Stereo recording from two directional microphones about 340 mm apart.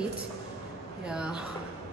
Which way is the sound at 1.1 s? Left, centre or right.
Centre.